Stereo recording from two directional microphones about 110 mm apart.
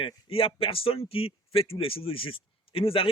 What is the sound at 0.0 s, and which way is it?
A man's voice, 60° left (ahead or behind).